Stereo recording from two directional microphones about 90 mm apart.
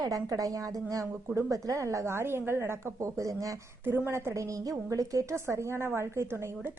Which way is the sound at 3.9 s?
25° right (ahead or behind).